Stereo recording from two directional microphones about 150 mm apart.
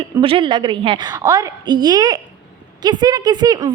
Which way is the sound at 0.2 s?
35° right (ahead or behind).